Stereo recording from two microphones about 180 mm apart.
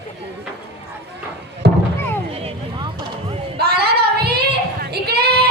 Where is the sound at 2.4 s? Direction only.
35° right (ahead or behind).